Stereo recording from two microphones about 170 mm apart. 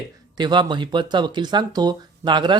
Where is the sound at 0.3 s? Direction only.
25° right (ahead or behind).